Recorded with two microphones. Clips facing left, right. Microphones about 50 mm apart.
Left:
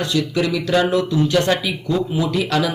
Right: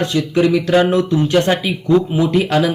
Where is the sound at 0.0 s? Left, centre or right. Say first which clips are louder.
Right 4 dB; right.